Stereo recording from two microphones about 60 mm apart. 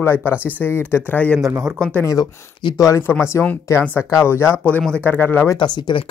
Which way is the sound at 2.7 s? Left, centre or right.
Left.